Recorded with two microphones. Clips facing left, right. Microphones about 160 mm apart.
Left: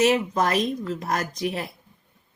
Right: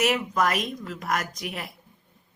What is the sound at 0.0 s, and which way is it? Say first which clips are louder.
Speech: left 3 dB; 30° left (ahead or behind).